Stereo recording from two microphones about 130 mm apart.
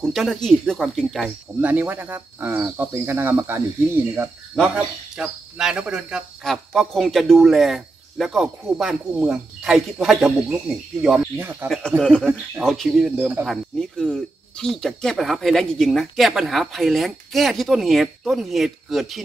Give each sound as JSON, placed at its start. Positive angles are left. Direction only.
{"t": 0.0, "sound": "speech", "side_deg": 0}
{"t": 1.6, "sound": "speech", "side_deg": -15}
{"t": 4.6, "sound": "speech", "side_deg": -5}
{"t": 11.3, "sound": "speech", "side_deg": -15}
{"t": 12.0, "sound": "speech", "side_deg": 5}